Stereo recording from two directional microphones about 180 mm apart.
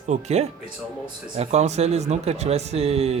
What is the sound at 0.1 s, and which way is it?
Speech, 35° right (ahead or behind).